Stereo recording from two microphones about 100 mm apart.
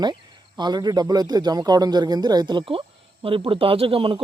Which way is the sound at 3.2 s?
65° right (ahead or behind).